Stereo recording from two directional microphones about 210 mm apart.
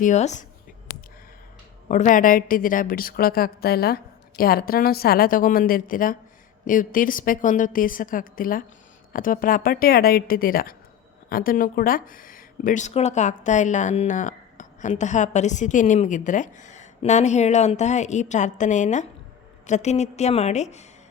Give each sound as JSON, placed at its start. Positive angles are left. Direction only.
{"t": 0.0, "sound": "speech", "side_deg": 35}
{"t": 1.9, "sound": "a woman's voice", "side_deg": 35}